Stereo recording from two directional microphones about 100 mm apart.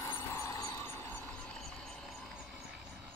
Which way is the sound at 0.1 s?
25° left (ahead or behind).